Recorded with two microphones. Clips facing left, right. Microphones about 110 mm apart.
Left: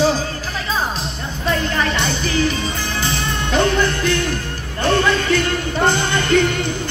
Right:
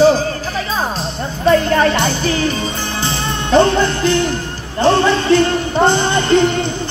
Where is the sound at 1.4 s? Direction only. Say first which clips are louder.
Right 8 dB; 40° right (ahead or behind).